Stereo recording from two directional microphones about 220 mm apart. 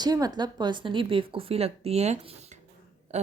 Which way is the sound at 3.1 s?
30° right (ahead or behind).